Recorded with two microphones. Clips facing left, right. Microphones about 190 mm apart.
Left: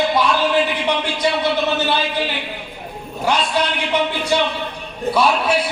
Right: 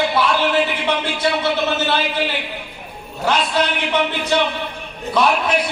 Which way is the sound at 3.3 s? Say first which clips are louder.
Even; 10° left (ahead or behind).